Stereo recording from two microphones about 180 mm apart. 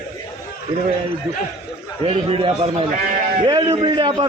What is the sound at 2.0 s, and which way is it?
A man's voice, 30° right (ahead or behind).